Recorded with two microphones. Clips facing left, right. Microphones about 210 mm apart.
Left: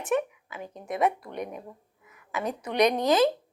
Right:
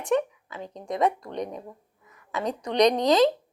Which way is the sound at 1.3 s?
20° right (ahead or behind).